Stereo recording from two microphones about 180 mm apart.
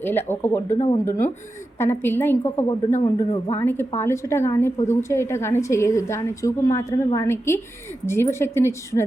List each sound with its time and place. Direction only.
0.0 s a woman's voice: 10° left (ahead or behind)
3.0 s a man's voice: 30° left (ahead or behind)
3.5 s a woman's voice: 15° left (ahead or behind)